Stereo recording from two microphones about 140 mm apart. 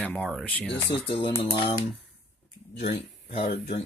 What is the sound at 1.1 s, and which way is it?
Speech, 35° left (ahead or behind).